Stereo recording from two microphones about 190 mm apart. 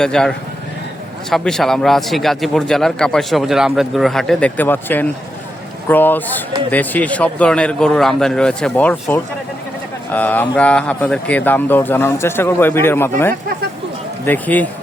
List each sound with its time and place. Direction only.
0.0 s a man's voice: 5° left (ahead or behind)